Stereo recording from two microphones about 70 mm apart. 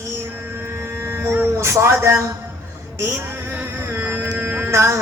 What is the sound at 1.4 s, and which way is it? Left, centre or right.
Mantra, right.